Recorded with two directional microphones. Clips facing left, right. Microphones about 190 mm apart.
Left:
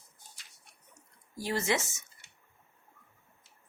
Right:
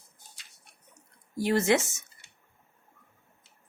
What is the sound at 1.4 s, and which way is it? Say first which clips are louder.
Speech: right 7 dB; 55° right (ahead or behind).